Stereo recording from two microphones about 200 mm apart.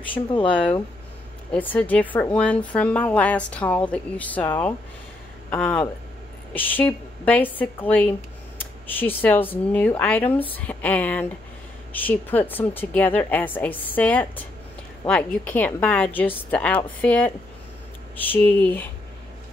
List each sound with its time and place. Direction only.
0.0 s speech: 25° left (ahead or behind)
1.5 s a woman's voice: 5° left (ahead or behind)
5.5 s a woman's voice: 10° left (ahead or behind)